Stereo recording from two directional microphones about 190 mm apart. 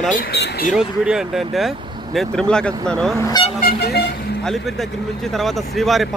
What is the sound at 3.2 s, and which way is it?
Speech, 20° left (ahead or behind).